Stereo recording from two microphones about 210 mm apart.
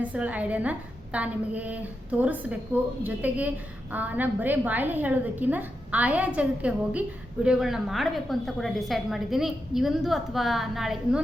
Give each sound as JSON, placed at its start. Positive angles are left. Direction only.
{"t": 0.0, "sound": "a woman's voice", "side_deg": -5}